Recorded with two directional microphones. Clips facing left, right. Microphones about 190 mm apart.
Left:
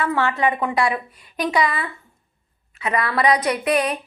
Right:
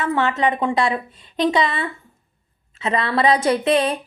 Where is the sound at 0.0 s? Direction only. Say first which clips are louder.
Right 1 dB; 20° right (ahead or behind).